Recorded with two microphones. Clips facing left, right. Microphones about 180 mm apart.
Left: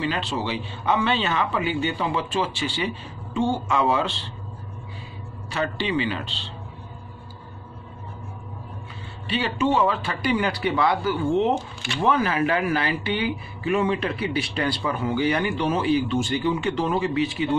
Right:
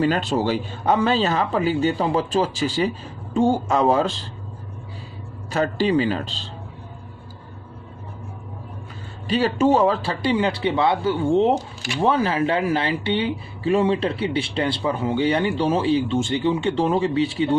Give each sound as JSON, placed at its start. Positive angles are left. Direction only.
{"t": 0.0, "sound": "speech", "side_deg": -45}
{"t": 5.5, "sound": "speech", "side_deg": -40}
{"t": 9.3, "sound": "speech", "side_deg": -40}